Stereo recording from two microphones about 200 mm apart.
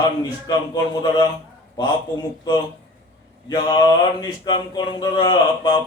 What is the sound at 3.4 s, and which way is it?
A man's voice, 20° left (ahead or behind).